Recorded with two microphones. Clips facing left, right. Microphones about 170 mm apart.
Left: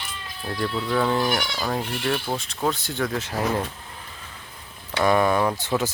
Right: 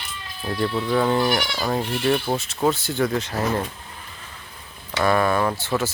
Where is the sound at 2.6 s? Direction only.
5° right (ahead or behind).